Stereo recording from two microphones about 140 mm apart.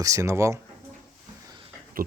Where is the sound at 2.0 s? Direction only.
90° right.